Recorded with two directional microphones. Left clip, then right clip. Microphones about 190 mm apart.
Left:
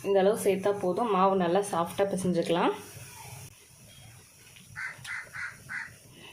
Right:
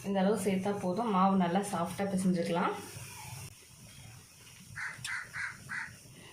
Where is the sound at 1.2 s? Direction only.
45° left (ahead or behind).